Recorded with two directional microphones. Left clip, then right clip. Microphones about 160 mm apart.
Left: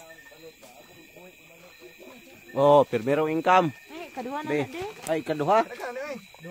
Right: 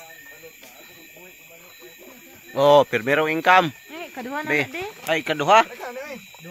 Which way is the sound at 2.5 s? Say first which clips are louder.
Right 3 dB; 15° left (ahead or behind).